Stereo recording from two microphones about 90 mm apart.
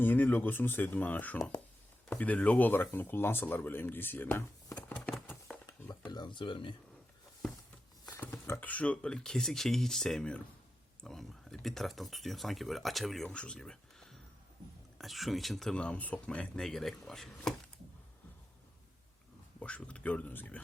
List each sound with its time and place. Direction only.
0.0 s speech: 20° left (ahead or behind)
5.5 s a sound: 5° left (ahead or behind)
6.1 s speech: 55° left (ahead or behind)
8.1 s a sound: 25° left (ahead or behind)
8.7 s speech: 15° left (ahead or behind)
13.3 s speech: 10° left (ahead or behind)
19.5 s speech: 15° left (ahead or behind)